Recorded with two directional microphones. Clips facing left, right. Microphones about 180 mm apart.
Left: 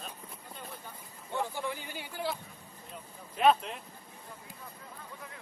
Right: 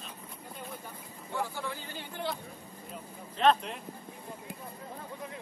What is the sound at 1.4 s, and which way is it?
Speech, 15° left (ahead or behind).